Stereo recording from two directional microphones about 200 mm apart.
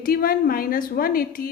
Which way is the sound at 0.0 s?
45° left (ahead or behind).